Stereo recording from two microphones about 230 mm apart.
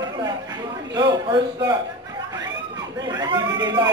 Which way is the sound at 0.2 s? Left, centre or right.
Centre.